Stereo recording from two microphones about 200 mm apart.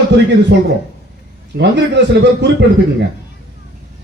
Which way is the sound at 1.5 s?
55° right (ahead or behind).